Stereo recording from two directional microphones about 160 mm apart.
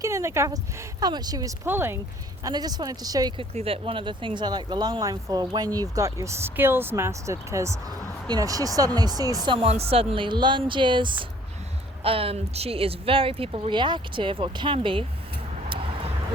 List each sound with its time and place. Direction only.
0.0 s speech: 20° right (ahead or behind)
2.4 s speech: 25° right (ahead or behind)
3.5 s speech: 35° right (ahead or behind)
9.6 s speech: 40° right (ahead or behind)